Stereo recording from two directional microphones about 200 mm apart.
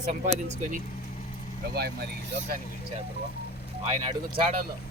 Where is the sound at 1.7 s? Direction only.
55° right (ahead or behind).